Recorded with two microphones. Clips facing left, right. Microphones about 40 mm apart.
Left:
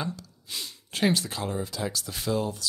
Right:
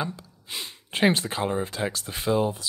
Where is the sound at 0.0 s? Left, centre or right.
Right.